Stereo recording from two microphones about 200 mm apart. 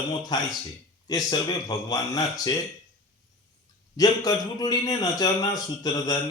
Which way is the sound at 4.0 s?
20° left (ahead or behind).